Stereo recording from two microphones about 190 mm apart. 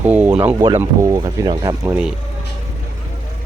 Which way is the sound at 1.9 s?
5° right (ahead or behind).